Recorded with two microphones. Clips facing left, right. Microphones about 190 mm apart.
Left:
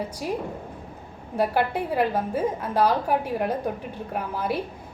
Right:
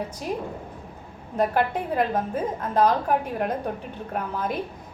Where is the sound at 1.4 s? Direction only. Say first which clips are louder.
Even; 10° left (ahead or behind).